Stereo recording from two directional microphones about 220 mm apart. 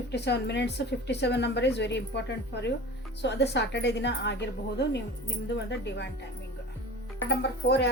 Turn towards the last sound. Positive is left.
turn(degrees=50)  # may be behind; listen again after turning